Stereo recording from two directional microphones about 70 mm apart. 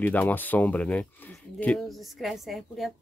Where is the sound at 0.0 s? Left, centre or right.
Left.